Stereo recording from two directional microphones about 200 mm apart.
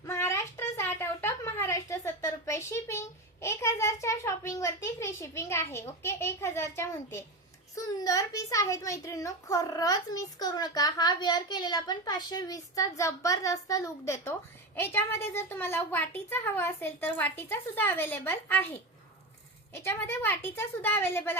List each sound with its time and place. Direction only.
0.0 s a sound: 15° left (ahead or behind)
7.8 s a child's voice: 15° left (ahead or behind)
19.7 s a child's voice: 10° left (ahead or behind)